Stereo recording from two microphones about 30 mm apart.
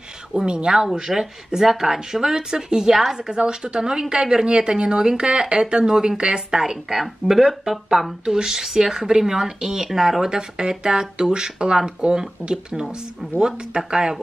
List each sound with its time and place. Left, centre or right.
0.5 s speech: right
0.9 s speech: centre
7.7 s speech: centre
8.3 s speech: right
9.8 s speech: centre
10.3 s speech: right